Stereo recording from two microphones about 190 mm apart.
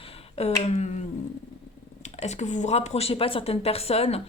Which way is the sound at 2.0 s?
35° left (ahead or behind).